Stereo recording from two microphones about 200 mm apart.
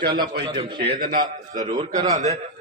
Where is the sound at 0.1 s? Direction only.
20° right (ahead or behind).